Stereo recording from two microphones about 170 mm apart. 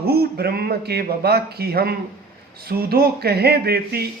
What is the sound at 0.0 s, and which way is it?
Speech, 65° right (ahead or behind).